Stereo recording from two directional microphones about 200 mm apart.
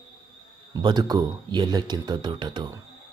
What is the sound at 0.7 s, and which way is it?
Speech, 20° right (ahead or behind).